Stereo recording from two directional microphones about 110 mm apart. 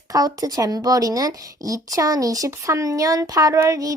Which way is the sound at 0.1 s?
35° right (ahead or behind).